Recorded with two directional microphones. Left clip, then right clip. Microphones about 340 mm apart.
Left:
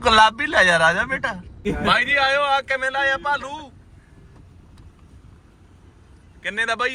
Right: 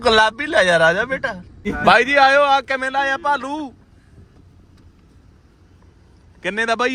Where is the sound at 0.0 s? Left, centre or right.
Centre.